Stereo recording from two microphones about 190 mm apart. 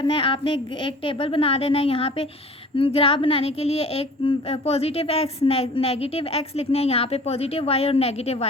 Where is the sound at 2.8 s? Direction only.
30° left (ahead or behind).